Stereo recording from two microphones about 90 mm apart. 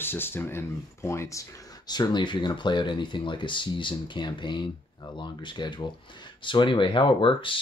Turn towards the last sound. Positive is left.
turn(degrees=70)  # may be behind; listen again after turning